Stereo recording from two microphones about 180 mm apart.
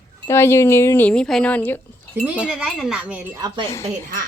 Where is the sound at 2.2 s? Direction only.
5° right (ahead or behind).